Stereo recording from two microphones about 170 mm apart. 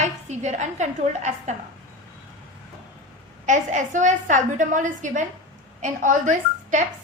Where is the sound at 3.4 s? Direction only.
45° right (ahead or behind).